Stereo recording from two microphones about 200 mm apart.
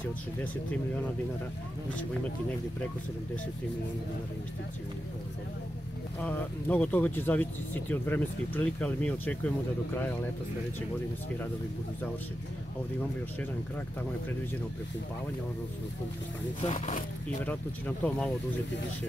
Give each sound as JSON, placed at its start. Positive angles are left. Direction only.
{"t": 6.1, "sound": "speech", "side_deg": 10}
{"t": 16.6, "sound": "speech", "side_deg": 40}
{"t": 17.5, "sound": "speech", "side_deg": 5}